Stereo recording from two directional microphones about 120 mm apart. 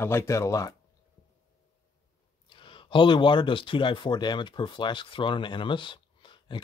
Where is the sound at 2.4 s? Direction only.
45° left (ahead or behind).